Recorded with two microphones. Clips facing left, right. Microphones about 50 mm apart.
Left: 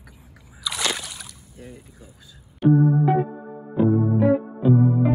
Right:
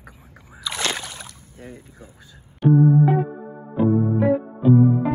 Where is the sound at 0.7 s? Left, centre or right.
Right.